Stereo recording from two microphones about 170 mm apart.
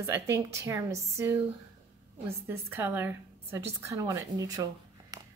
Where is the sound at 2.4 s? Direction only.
15° right (ahead or behind).